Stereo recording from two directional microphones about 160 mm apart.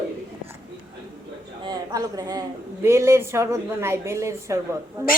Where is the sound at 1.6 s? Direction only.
25° right (ahead or behind).